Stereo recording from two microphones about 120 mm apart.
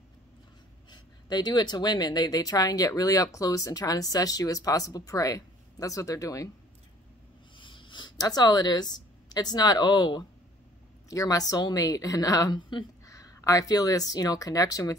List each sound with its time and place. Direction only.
0.8 s a woman's voice: 35° left (ahead or behind)
7.5 s speech: 45° left (ahead or behind)
13.0 s speech: 25° left (ahead or behind)